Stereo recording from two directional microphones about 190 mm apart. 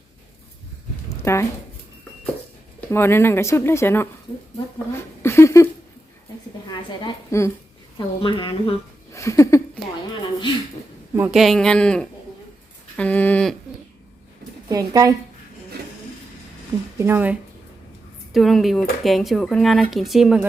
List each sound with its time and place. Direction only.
1.2 s speech: 15° left (ahead or behind)
2.9 s speech: 10° left (ahead or behind)
5.2 s a sound: 15° left (ahead or behind)
6.7 s a woman's voice: 20° left (ahead or behind)
7.9 s a woman's voice: 25° left (ahead or behind)
9.1 s a sound: 15° left (ahead or behind)
11.1 s a woman's voice: 10° right (ahead or behind)
11.3 s speech: centre (ahead or behind)
13.0 s a sound: 10° left (ahead or behind)
14.7 s speech: 20° right (ahead or behind)
17.0 s speech: 10° right (ahead or behind)
18.3 s speech: centre (ahead or behind)